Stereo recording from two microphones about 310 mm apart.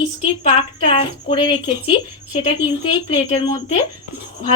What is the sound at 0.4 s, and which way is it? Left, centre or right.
A woman's voice, centre.